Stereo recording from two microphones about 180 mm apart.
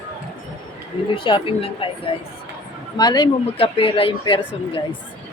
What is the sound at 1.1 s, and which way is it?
Speech, 30° left (ahead or behind).